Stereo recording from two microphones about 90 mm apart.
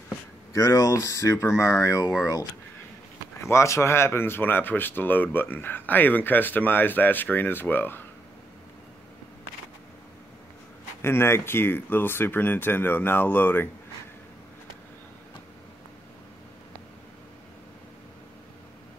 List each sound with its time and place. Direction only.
0.5 s speech: 40° left (ahead or behind)
3.3 s speech: 30° left (ahead or behind)
11.0 s speech: 25° left (ahead or behind)